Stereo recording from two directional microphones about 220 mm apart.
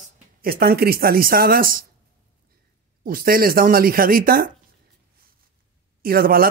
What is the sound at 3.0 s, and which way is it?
A man's voice, 40° right (ahead or behind).